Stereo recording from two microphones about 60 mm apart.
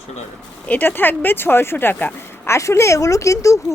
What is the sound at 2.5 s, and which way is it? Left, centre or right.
Speech, left.